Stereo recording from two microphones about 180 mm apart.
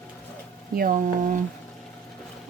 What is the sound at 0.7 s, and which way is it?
Speech, 50° right (ahead or behind).